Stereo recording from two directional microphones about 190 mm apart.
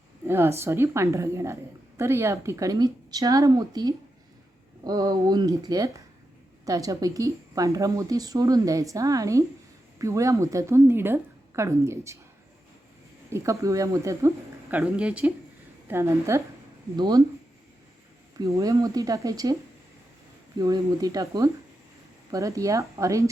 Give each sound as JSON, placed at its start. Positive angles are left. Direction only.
{"t": 0.3, "sound": "speech", "side_deg": -15}
{"t": 13.3, "sound": "speech", "side_deg": -15}
{"t": 18.3, "sound": "speech", "side_deg": -15}
{"t": 20.6, "sound": "speech", "side_deg": -20}